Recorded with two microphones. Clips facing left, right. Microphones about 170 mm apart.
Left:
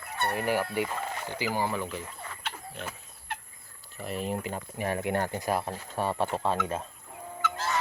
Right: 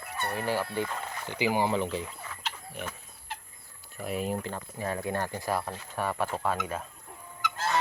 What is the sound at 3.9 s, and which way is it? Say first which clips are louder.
Speech: right 1 dB; 5° right (ahead or behind).